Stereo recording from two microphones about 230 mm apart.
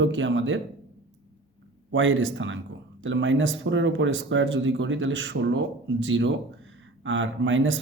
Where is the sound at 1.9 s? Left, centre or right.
Right.